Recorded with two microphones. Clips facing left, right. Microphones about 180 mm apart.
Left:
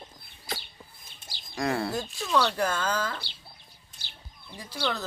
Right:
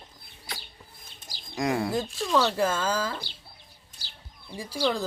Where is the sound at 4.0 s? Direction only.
35° right (ahead or behind).